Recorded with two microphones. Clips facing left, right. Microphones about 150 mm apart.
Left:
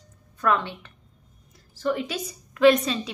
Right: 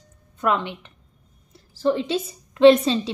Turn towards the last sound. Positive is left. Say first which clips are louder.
# right 5 dB
turn(degrees=-30)  # may be behind; listen again after turning